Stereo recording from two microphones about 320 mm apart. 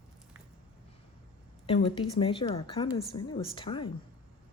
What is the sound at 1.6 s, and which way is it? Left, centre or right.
Speech, centre.